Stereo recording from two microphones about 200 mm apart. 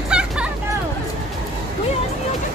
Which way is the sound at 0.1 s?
5° right (ahead or behind).